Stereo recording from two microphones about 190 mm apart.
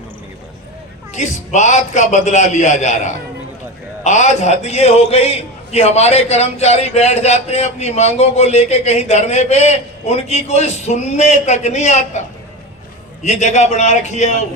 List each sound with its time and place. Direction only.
1.1 s a man's voice: 40° left (ahead or behind)
13.2 s a man's voice: 35° left (ahead or behind)